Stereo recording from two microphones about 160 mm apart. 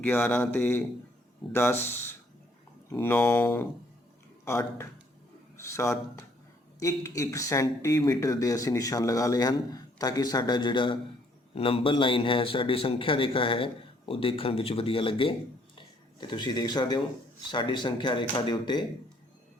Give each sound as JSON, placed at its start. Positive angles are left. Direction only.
{"t": 0.0, "sound": "speech", "side_deg": 10}
{"t": 1.8, "sound": "a man's voice", "side_deg": 15}